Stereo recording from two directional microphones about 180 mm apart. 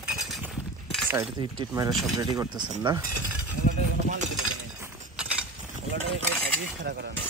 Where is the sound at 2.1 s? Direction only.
20° right (ahead or behind).